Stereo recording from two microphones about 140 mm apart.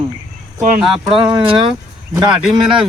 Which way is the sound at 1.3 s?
35° right (ahead or behind).